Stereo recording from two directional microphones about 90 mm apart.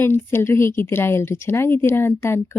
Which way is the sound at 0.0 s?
25° left (ahead or behind).